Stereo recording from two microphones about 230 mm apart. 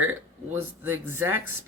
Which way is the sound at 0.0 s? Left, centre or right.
Centre.